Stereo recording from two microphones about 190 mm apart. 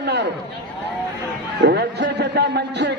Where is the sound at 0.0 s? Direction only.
65° right (ahead or behind).